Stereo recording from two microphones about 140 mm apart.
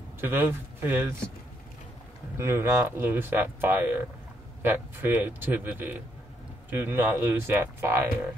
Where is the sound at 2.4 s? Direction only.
15° right (ahead or behind).